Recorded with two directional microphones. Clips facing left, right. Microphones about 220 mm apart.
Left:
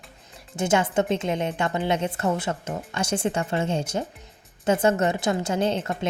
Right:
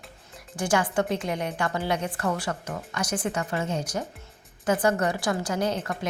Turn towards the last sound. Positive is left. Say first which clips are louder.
# left 3 dB
turn(degrees=25)  # may be behind; listen again after turning